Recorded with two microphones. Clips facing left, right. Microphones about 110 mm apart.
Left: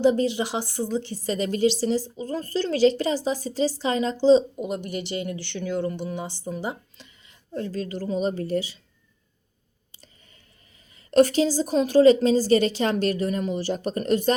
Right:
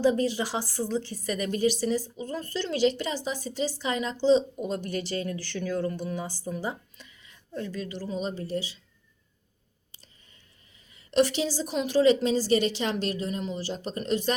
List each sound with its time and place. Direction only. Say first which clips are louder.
0.0 s speech: left 3 dB; 20° left (ahead or behind)
1.1 s a woman's voice: left 4 dB; 30° left (ahead or behind)
4.5 s speech: left 1 dB; 20° left (ahead or behind)
7.5 s a woman's voice: left 4 dB; 40° left (ahead or behind)
8.4 s speech: left 6 dB; 60° left (ahead or behind)
11.1 s a woman's voice: left 6 dB; 45° left (ahead or behind)